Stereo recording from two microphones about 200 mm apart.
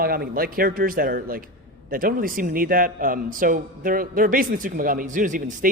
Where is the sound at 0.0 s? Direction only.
45° right (ahead or behind).